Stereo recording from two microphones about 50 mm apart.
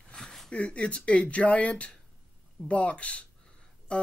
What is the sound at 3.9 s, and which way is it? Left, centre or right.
Music, left.